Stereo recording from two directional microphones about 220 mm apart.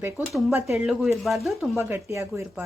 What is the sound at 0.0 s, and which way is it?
Speech, 5° right (ahead or behind).